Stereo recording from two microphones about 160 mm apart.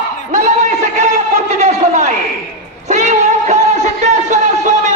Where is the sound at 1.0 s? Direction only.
45° right (ahead or behind).